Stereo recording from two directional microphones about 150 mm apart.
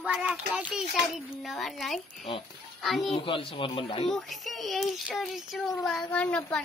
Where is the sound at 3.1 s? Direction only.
35° left (ahead or behind).